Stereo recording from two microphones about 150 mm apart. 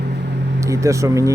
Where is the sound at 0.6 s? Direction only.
20° right (ahead or behind).